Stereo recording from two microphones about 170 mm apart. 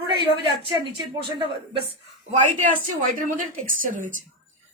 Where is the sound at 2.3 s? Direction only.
50° right (ahead or behind).